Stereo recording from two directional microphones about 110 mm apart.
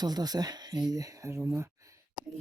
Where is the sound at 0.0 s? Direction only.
35° right (ahead or behind).